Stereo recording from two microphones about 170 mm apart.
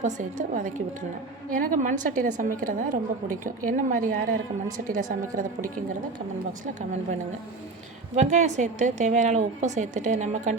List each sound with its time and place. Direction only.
0.0 s a woman's voice: 45° right (ahead or behind)
8.1 s a woman's voice: 45° right (ahead or behind)